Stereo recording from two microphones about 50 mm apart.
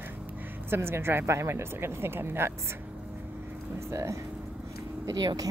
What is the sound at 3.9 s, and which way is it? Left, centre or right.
Speech, right.